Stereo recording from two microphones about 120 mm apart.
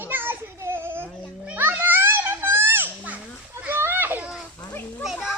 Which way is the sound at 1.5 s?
15° right (ahead or behind).